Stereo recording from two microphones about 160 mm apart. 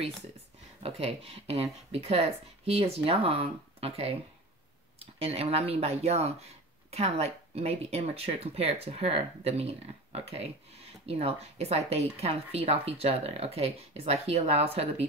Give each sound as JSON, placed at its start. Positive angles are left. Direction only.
{"t": 0.8, "sound": "speech", "side_deg": -35}